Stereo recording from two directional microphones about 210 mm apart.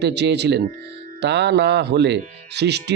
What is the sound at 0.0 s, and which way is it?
Speech, 55° right (ahead or behind).